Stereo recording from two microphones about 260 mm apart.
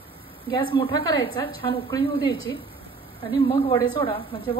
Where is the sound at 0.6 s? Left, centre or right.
Left.